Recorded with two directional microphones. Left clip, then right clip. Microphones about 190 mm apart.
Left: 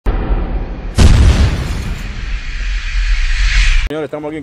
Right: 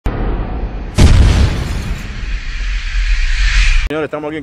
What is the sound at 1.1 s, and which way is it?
Boom, centre (ahead or behind).